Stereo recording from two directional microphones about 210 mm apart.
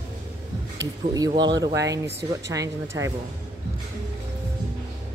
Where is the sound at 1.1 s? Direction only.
20° right (ahead or behind).